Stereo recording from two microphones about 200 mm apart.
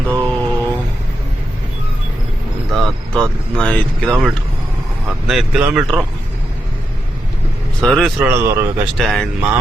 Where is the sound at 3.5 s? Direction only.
5° left (ahead or behind).